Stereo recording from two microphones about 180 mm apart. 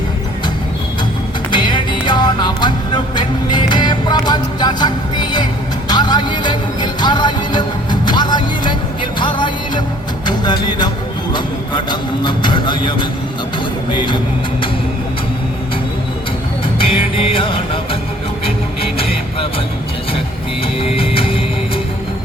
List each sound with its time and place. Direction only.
1.5 s music: 25° left (ahead or behind)
11.3 s vehicle: 25° left (ahead or behind)
13.9 s music: 25° left (ahead or behind)
16.7 s music: 30° left (ahead or behind)
18.9 s music: 30° left (ahead or behind)
20.9 s music: 30° left (ahead or behind)